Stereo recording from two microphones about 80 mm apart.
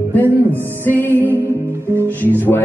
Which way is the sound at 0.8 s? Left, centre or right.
Left.